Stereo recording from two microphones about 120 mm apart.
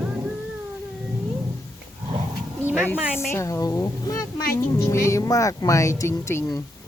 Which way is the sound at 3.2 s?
20° left (ahead or behind).